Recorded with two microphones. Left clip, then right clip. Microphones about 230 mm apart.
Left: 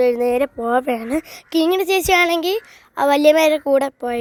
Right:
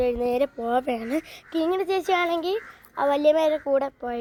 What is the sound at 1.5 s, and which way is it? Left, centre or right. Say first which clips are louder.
A woman's voice: left 8 dB; left.